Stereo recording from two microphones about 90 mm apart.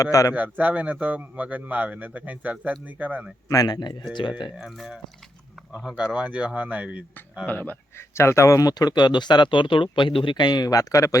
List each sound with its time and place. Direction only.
0.0 s a man's voice: 40° left (ahead or behind)
0.3 s speech: 20° right (ahead or behind)
3.5 s speech: 45° left (ahead or behind)
6.1 s speech: 15° right (ahead or behind)
7.4 s speech: 20° left (ahead or behind); by 10.3 s 80° left
10.3 s speech: 50° left (ahead or behind)